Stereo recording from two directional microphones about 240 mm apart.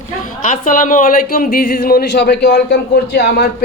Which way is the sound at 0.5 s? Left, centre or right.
Left.